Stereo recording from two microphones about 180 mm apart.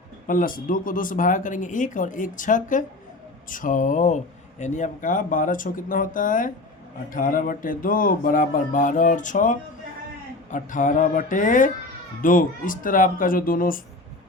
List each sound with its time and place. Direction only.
0.3 s speech: 50° left (ahead or behind)